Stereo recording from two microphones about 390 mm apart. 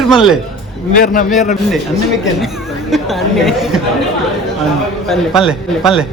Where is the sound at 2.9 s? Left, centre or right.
Centre.